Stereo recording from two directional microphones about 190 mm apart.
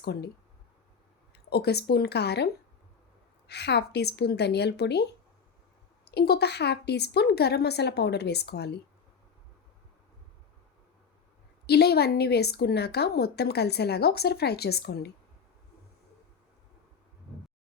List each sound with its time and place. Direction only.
0.0 s speech: 60° left (ahead or behind)
1.5 s a woman's voice: 60° left (ahead or behind)
6.1 s a woman's voice: 55° left (ahead or behind)
11.6 s a woman's voice: 60° left (ahead or behind)